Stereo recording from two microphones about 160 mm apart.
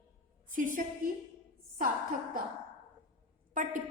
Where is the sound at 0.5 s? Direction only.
55° right (ahead or behind).